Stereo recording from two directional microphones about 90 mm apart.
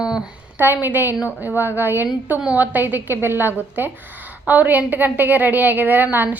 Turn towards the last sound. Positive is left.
turn(degrees=-20)  # may be behind; listen again after turning